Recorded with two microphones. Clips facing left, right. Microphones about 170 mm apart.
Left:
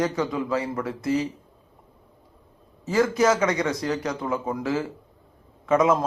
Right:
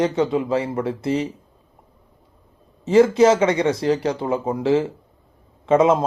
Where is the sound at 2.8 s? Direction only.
25° right (ahead or behind).